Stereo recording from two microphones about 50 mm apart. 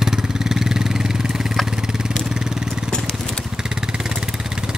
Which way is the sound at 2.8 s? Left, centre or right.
Centre.